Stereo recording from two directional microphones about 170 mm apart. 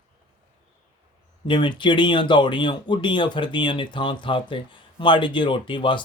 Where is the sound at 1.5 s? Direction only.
30° left (ahead or behind).